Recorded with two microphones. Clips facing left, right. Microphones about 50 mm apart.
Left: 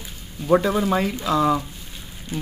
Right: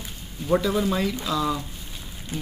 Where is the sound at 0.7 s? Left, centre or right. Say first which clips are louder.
Left 3 dB; left.